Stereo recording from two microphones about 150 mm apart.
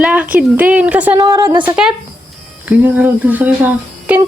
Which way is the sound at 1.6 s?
10° right (ahead or behind).